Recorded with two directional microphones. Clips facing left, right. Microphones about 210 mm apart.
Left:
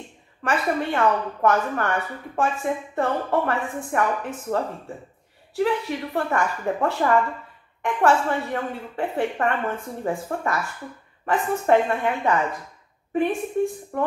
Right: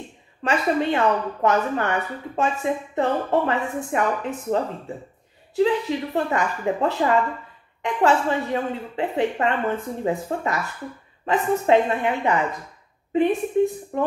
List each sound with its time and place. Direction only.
0.4 s a woman's voice: 20° right (ahead or behind)